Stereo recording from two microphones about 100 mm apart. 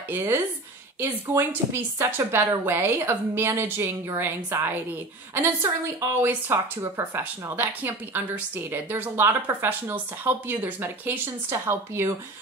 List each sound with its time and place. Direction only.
0.1 s speech: 30° right (ahead or behind)